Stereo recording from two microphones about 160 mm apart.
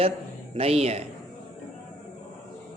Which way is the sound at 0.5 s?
40° right (ahead or behind).